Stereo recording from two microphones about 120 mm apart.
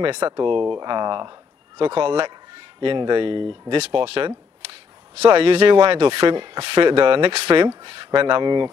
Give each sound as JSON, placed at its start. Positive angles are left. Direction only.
{"t": 0.1, "sound": "speech", "side_deg": -35}
{"t": 5.3, "sound": "speech", "side_deg": -50}